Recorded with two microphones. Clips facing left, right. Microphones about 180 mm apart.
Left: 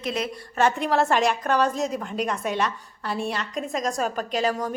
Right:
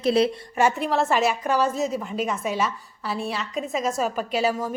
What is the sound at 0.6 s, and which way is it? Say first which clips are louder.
A woman's voice: even; centre (ahead or behind).